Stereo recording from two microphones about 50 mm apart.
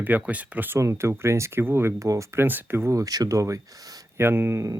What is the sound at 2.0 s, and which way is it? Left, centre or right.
Speech, right.